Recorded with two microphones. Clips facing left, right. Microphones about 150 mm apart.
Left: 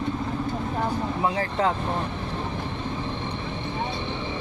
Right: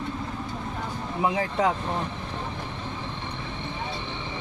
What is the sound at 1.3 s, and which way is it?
Speech, 10° right (ahead or behind).